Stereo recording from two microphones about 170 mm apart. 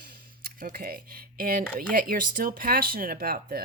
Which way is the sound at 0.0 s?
60° right (ahead or behind).